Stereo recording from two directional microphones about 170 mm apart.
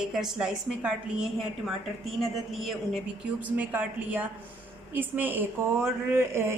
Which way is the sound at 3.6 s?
10° right (ahead or behind).